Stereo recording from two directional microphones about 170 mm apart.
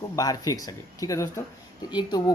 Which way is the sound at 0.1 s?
20° left (ahead or behind).